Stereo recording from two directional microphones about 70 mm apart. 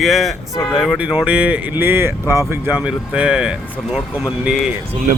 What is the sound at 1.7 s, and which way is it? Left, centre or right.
Speech, right.